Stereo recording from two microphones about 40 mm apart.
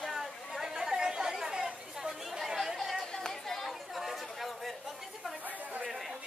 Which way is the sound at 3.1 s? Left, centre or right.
Centre.